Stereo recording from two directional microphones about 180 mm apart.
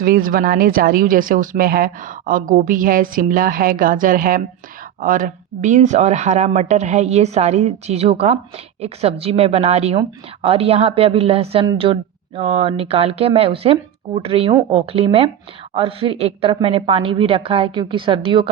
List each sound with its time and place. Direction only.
0.0 s a woman's voice: 55° right (ahead or behind); by 18.4 s 25° right (ahead or behind)